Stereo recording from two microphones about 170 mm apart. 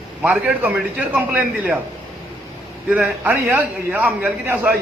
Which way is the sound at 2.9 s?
10° right (ahead or behind).